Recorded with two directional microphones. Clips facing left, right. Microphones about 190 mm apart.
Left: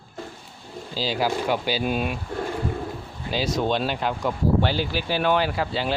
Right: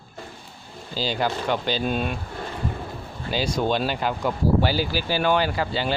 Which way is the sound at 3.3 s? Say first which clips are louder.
Even; centre (ahead or behind).